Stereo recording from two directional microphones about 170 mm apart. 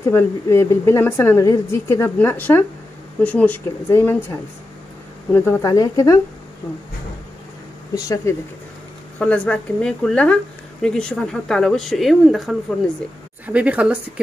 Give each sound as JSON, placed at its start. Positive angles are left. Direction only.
{"t": 0.1, "sound": "a woman's voice", "side_deg": 15}
{"t": 5.3, "sound": "speech", "side_deg": 15}
{"t": 7.9, "sound": "speech", "side_deg": 20}
{"t": 9.2, "sound": "speech", "side_deg": 5}